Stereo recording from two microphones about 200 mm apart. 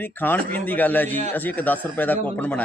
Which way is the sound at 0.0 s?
10° left (ahead or behind).